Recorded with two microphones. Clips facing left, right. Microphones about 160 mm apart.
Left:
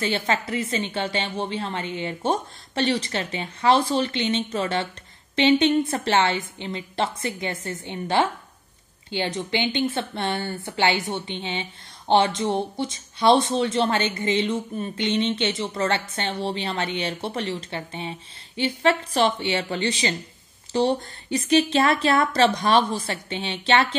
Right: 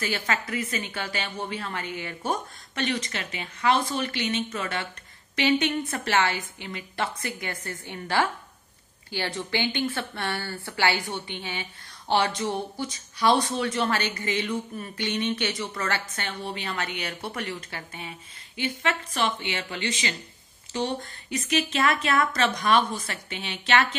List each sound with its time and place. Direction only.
0.0 s speech: 25° left (ahead or behind)